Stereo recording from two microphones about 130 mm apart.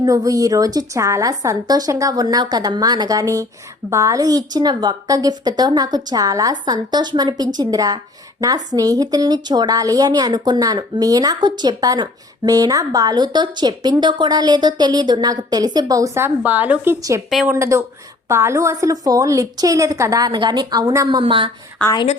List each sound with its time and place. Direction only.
0.0 s a woman's voice: 25° right (ahead or behind)
17.2 s speech: centre (ahead or behind)
17.5 s a woman's voice: 20° right (ahead or behind)
21.2 s a woman's voice: 40° right (ahead or behind)